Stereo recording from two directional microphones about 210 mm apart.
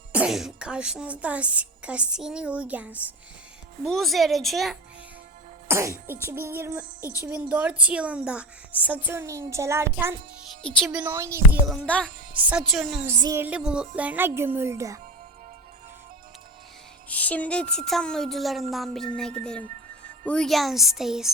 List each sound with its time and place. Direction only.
0.1 s speech: 5° right (ahead or behind)
5.6 s speech: 15° right (ahead or behind)
7.0 s a woman's voice: 15° left (ahead or behind)
7.3 s speech: 10° right (ahead or behind)
10.6 s speech: 5° left (ahead or behind); by 11.6 s 15° right (ahead or behind)
11.7 s speech: 5° left (ahead or behind)
13.1 s speech: 15° right (ahead or behind)
17.1 s speech: 5° left (ahead or behind)
20.2 s speech: 5° left (ahead or behind)